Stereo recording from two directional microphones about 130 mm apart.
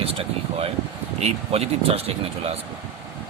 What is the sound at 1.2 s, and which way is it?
Speech, 50° right (ahead or behind).